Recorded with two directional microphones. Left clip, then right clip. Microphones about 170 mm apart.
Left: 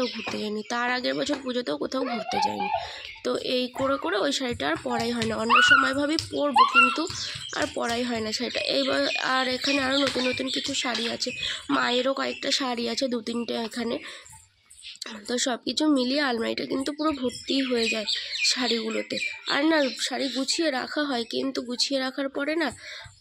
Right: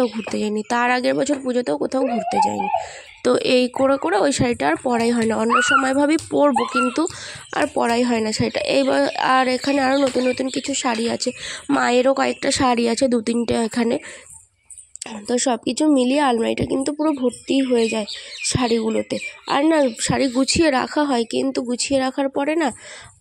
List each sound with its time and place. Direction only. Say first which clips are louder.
0.0 s speech: right 7 dB; 50° right (ahead or behind)
3.3 s speech: right 10 dB; 60° right (ahead or behind)
15.2 s speech: right 7 dB; 40° right (ahead or behind)
18.4 s speech: right 6 dB; 45° right (ahead or behind)